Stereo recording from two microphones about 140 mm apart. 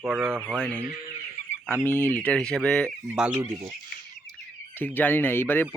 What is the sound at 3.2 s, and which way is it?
Speech, 15° right (ahead or behind).